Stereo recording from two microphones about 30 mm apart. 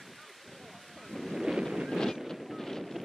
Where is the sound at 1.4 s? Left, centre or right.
Centre.